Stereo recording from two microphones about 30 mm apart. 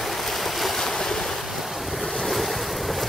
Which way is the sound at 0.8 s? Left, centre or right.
Centre.